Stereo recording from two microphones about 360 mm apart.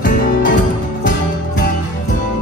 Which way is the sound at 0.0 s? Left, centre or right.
Left.